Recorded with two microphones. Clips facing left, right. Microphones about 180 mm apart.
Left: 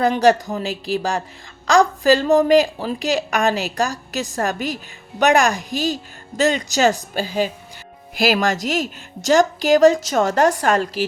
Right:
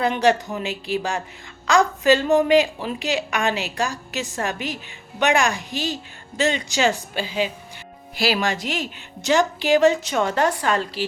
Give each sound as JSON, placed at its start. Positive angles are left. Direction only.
{"t": 0.0, "sound": "a woman's voice", "side_deg": 40}